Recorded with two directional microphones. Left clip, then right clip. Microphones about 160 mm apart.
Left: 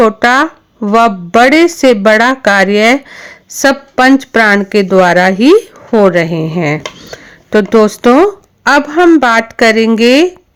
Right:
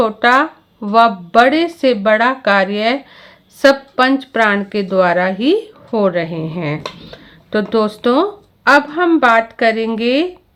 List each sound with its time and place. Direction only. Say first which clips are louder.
0.0 s speech: left 4 dB; 50° left (ahead or behind)